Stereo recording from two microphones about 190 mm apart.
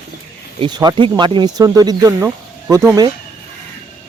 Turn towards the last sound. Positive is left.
turn(degrees=-20)  # may be behind; listen again after turning